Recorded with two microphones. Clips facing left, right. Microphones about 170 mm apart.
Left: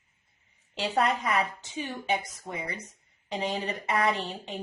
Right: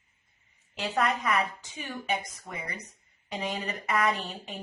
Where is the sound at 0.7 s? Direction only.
30° left (ahead or behind).